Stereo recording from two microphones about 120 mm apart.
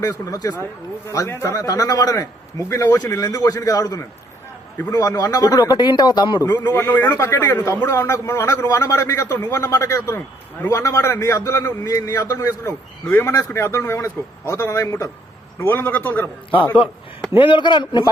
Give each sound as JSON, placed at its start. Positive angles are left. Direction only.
{"t": 0.0, "sound": "a man's voice", "side_deg": 30}
{"t": 6.7, "sound": "a man's voice", "side_deg": 15}
{"t": 17.3, "sound": "a man's voice", "side_deg": 45}